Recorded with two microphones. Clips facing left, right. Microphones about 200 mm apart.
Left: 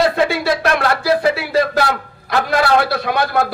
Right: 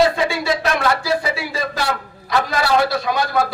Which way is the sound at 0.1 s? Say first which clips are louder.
Left 3 dB; 60° left (ahead or behind).